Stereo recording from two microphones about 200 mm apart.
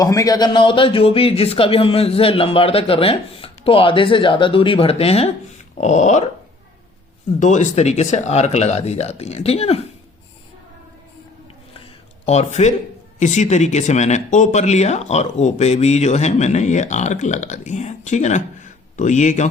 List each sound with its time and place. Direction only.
0.0 s a man's voice: 15° left (ahead or behind); by 6.2 s 35° left (ahead or behind)
7.3 s speech: 40° left (ahead or behind)
12.2 s speech: 35° left (ahead or behind)